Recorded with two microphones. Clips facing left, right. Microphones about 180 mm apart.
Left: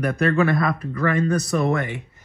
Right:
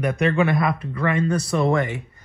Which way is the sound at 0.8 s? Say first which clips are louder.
Left 1 dB; 30° right (ahead or behind).